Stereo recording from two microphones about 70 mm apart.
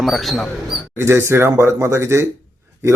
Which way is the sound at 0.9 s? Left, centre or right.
Right.